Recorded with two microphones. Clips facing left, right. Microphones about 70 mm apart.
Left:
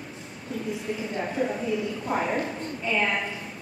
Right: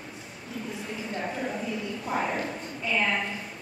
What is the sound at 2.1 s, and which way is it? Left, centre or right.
Speech, centre.